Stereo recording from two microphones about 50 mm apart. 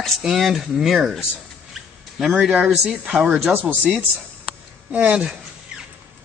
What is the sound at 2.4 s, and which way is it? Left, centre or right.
Speech, centre.